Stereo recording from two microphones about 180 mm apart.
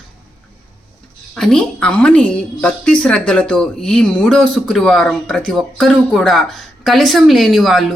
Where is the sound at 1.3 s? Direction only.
5° left (ahead or behind).